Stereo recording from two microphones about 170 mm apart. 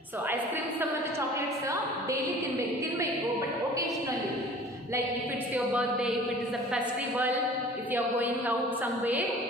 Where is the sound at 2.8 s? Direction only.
20° right (ahead or behind).